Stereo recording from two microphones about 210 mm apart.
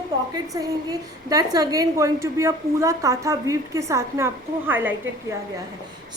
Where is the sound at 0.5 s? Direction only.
15° right (ahead or behind).